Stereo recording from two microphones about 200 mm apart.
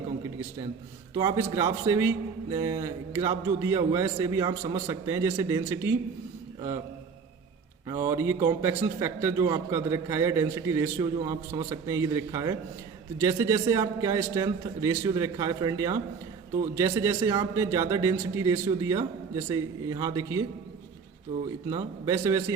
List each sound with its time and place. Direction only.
1.1 s a man's voice: 15° right (ahead or behind)
7.9 s a man's voice: 15° right (ahead or behind)
21.7 s a man's voice: 15° right (ahead or behind)